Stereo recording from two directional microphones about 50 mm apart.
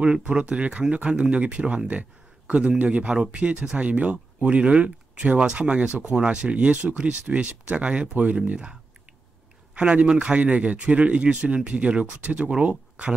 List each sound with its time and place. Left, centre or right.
0.0 s speech: right
9.8 s speech: centre